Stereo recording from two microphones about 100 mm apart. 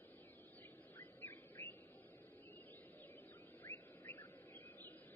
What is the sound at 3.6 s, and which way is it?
Bird, 20° left (ahead or behind).